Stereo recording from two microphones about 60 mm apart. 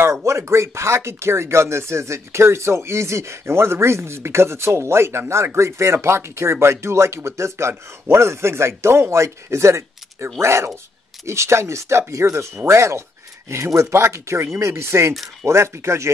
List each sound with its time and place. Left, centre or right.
0.0 s speech: right